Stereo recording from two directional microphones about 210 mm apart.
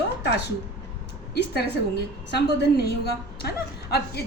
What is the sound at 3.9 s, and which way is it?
Speech, 50° left (ahead or behind).